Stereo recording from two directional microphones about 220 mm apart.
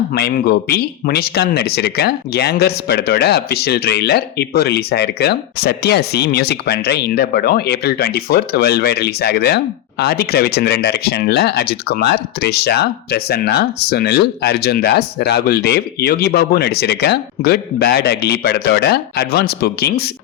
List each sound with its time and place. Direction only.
0.1 s speech: 45° left (ahead or behind)